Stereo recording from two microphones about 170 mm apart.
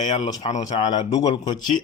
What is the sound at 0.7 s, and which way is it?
Speech, 25° left (ahead or behind).